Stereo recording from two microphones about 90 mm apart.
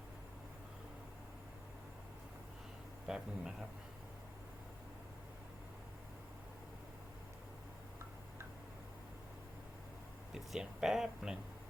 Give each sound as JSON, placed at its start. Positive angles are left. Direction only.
{"t": 3.1, "sound": "speech", "side_deg": -5}
{"t": 10.3, "sound": "speech", "side_deg": -5}